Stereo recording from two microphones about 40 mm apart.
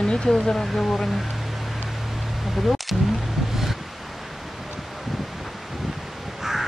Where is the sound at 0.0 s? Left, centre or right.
Centre.